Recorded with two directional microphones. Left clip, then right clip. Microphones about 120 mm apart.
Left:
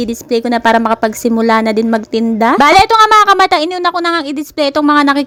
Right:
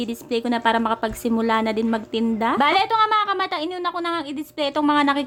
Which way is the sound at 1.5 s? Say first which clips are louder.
Left 10 dB; 65° left (ahead or behind).